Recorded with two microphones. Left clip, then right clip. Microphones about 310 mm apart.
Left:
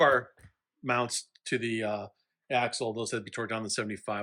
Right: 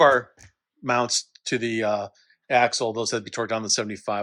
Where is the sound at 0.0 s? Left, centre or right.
Centre.